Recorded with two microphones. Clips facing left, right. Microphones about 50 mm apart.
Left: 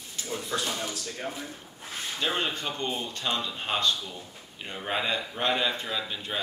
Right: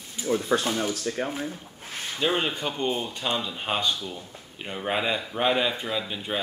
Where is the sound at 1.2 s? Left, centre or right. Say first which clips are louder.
Right 3 dB; right.